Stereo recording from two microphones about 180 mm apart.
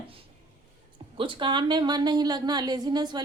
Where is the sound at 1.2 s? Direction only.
25° right (ahead or behind).